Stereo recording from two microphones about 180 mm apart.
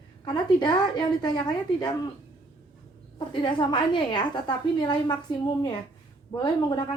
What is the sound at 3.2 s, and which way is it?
Speech, 25° left (ahead or behind).